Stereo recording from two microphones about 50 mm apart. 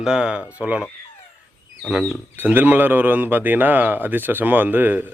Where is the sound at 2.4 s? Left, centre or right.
Right.